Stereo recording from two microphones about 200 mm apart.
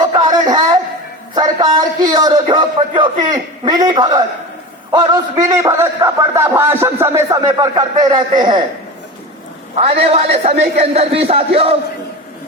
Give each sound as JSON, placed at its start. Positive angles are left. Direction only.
{"t": 0.0, "sound": "a sound", "side_deg": -20}
{"t": 1.4, "sound": "a man's voice", "side_deg": -20}
{"t": 9.7, "sound": "a man's voice", "side_deg": -30}